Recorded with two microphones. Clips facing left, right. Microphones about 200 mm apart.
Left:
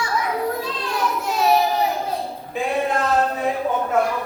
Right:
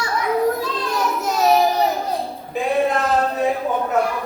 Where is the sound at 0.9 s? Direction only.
40° right (ahead or behind).